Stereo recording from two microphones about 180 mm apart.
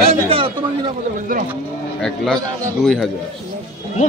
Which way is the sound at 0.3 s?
30° right (ahead or behind).